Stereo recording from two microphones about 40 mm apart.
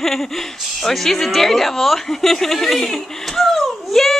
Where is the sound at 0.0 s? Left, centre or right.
Centre.